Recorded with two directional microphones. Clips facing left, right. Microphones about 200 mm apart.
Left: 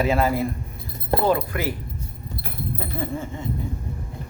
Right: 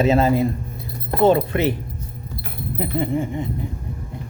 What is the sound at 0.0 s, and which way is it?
A man's voice, 25° right (ahead or behind).